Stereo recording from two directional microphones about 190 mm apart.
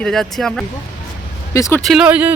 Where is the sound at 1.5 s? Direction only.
15° left (ahead or behind).